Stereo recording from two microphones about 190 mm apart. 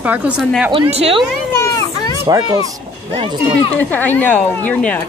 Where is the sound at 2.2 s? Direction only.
20° right (ahead or behind).